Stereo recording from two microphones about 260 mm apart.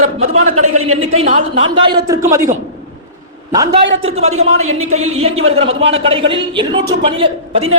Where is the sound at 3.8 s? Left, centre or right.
Right.